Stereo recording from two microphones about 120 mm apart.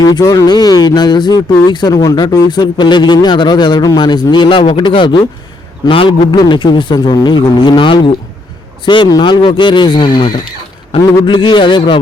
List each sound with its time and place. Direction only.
0.0 s a man's voice: 30° left (ahead or behind)